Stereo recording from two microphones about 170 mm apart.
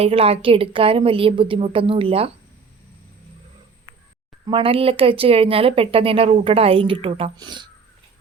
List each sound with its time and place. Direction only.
0.0 s speech: 35° right (ahead or behind)
4.4 s speech: 30° right (ahead or behind)